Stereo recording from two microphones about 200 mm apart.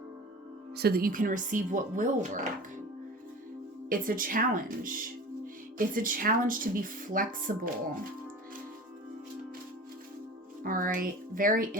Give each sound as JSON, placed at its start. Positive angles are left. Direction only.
{"t": 0.8, "sound": "speech", "side_deg": -50}
{"t": 3.8, "sound": "speech", "side_deg": -45}
{"t": 10.6, "sound": "speech", "side_deg": -45}